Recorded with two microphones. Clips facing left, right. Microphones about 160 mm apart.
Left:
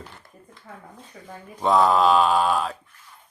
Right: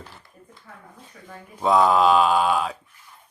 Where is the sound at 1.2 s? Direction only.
30° left (ahead or behind).